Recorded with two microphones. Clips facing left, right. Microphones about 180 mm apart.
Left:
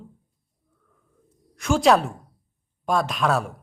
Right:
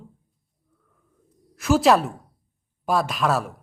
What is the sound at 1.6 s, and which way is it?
Speech, 5° right (ahead or behind).